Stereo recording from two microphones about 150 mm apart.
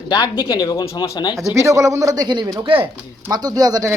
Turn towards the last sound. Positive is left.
turn(degrees=-25)  # may be behind; listen again after turning